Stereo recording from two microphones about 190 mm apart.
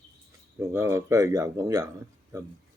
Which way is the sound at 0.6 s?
15° right (ahead or behind).